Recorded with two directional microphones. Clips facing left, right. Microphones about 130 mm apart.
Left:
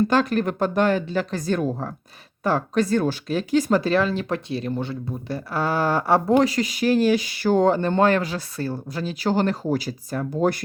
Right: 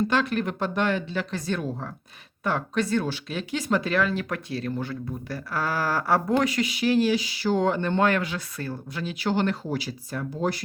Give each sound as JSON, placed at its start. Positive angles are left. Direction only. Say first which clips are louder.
{"t": 0.1, "sound": "speech", "louder": "left 4 dB", "side_deg": 40}